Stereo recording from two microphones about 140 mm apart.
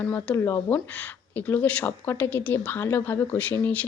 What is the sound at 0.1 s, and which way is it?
Speech, 15° left (ahead or behind).